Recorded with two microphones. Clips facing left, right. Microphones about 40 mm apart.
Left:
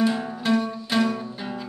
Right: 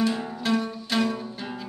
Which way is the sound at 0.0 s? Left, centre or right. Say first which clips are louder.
Left 2 dB; centre.